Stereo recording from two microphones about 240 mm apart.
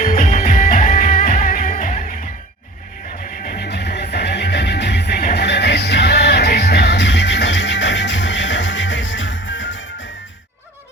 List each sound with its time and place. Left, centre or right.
0.0 s music: left
3.4 s music: left